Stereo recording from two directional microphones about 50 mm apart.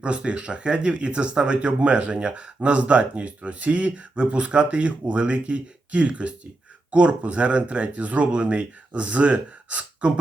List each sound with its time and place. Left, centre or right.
0.0 s speech: right